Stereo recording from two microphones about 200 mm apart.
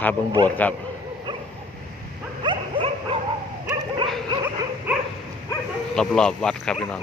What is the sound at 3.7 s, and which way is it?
Dog, 25° right (ahead or behind).